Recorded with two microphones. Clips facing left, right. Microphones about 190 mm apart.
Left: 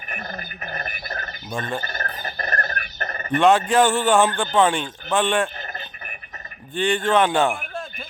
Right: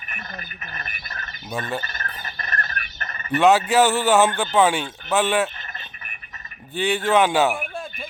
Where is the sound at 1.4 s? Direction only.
5° right (ahead or behind).